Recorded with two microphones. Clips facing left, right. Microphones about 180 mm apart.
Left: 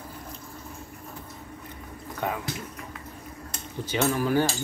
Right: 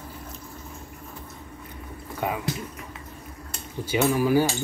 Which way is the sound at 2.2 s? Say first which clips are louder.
Right 2 dB; 10° right (ahead or behind).